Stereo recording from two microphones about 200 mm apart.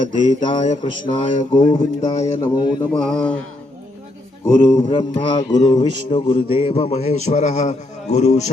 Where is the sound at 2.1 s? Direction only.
30° left (ahead or behind).